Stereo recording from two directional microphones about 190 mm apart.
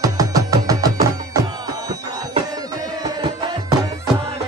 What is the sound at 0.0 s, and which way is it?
Music, 15° right (ahead or behind).